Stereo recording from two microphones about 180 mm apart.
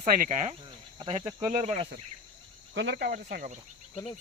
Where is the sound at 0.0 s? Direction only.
45° right (ahead or behind).